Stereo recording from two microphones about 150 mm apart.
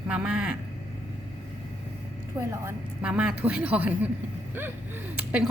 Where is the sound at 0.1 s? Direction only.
5° right (ahead or behind).